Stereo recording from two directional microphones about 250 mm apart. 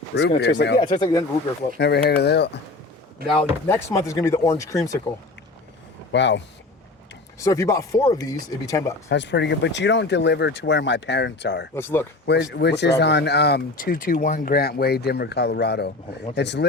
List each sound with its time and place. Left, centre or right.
0.2 s speech: left
0.8 s speech: centre
1.8 s speech: left
3.2 s speech: right
3.7 s speech: centre
6.1 s speech: left
7.3 s speech: centre
9.0 s speech: left
11.7 s speech: centre
12.2 s speech: left